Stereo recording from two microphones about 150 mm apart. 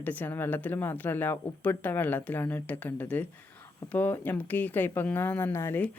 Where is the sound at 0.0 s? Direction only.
10° left (ahead or behind).